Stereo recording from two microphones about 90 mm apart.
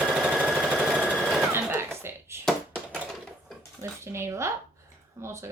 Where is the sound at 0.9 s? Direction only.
15° right (ahead or behind).